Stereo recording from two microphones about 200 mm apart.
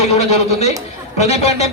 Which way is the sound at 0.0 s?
30° left (ahead or behind).